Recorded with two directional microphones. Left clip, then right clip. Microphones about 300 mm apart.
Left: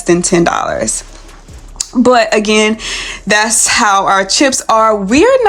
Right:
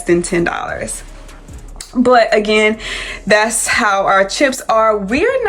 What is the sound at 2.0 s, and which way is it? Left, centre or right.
Speech, centre.